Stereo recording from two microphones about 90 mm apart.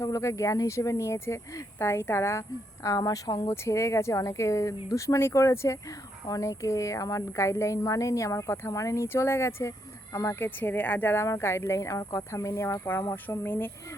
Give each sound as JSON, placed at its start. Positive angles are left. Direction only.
{"t": 0.0, "sound": "a woman's voice", "side_deg": 35}
{"t": 2.8, "sound": "speech", "side_deg": 40}
{"t": 3.5, "sound": "a woman's voice", "side_deg": 35}
{"t": 10.6, "sound": "a woman's voice", "side_deg": 20}